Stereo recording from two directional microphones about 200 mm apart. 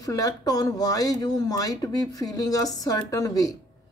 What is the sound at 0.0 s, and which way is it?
Speech, 15° left (ahead or behind).